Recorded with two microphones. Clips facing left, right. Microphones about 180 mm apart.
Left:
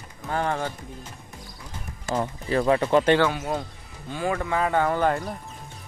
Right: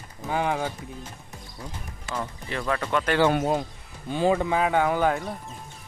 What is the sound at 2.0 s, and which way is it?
Speech, 35° left (ahead or behind).